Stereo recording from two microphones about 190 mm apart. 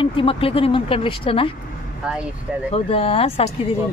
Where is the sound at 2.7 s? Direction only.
30° left (ahead or behind).